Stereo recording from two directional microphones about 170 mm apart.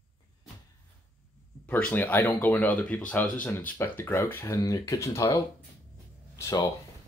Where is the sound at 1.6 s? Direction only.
10° left (ahead or behind).